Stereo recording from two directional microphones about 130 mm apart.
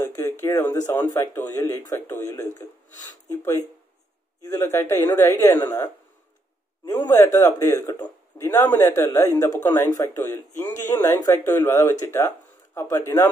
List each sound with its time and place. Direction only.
0.0 s speech: 20° left (ahead or behind)
4.5 s speech: 15° left (ahead or behind)
6.9 s a man's voice: 20° left (ahead or behind)